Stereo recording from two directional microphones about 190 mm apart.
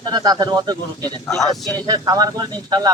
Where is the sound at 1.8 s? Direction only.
20° right (ahead or behind).